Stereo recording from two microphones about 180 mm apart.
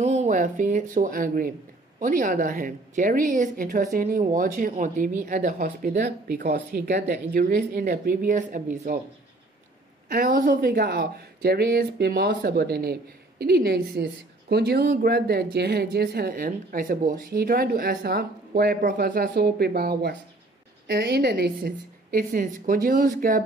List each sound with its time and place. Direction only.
0.0 s speech: 40° right (ahead or behind)
10.0 s speech: 50° right (ahead or behind)